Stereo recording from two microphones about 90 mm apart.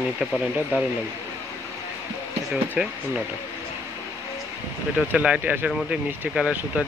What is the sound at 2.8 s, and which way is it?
Speech, 15° right (ahead or behind).